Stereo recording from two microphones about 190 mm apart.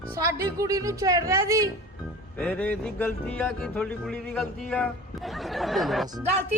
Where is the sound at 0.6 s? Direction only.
15° right (ahead or behind).